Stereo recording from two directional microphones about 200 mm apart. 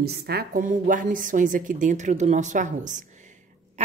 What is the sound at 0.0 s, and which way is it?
A woman's voice, 50° right (ahead or behind).